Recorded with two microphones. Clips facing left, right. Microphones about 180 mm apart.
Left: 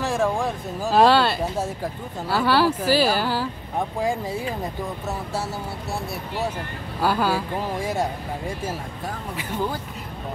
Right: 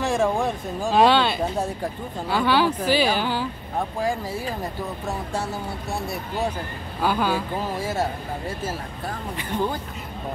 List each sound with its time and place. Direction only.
0.0 s speech: centre (ahead or behind)
4.0 s speech: 20° left (ahead or behind)
7.0 s speech: 5° left (ahead or behind)